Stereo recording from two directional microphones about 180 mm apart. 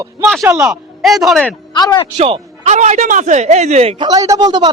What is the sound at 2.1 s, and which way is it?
Speech, 35° right (ahead or behind).